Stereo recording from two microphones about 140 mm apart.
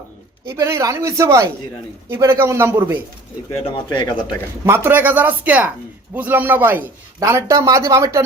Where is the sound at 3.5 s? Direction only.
40° left (ahead or behind).